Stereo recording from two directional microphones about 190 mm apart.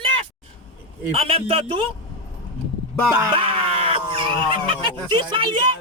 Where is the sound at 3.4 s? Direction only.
30° right (ahead or behind).